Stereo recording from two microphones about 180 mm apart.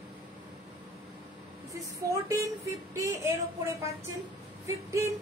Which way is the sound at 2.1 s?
15° right (ahead or behind).